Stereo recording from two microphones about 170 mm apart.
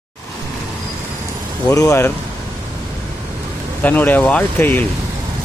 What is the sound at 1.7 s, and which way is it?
Speech, 20° left (ahead or behind).